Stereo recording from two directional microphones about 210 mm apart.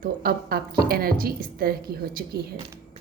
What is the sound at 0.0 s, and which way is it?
A woman's voice, 45° right (ahead or behind).